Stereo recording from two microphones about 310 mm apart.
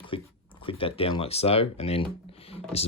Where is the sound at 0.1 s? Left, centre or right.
Centre.